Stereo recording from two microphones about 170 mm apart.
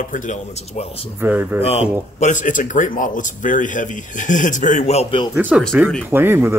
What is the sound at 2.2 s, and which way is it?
Speech, 45° left (ahead or behind).